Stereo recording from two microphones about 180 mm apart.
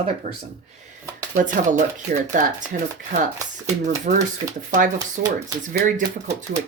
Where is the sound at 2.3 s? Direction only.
45° right (ahead or behind).